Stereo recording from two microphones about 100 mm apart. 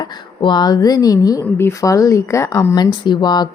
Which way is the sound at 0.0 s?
45° left (ahead or behind).